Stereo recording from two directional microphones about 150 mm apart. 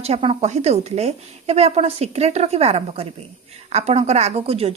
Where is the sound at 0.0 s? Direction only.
40° right (ahead or behind).